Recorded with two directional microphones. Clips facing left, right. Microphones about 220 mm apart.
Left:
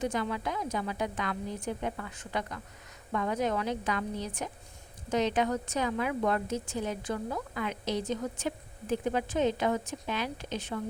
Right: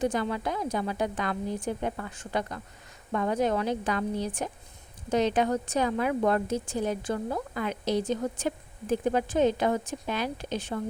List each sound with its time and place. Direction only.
0.0 s a woman's voice: 35° right (ahead or behind)
8.4 s speech: 45° right (ahead or behind)